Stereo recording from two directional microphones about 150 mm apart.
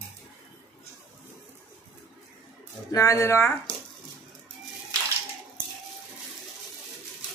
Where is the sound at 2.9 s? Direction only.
20° left (ahead or behind).